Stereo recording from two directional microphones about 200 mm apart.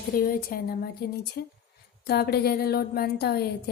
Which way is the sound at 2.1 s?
50° left (ahead or behind).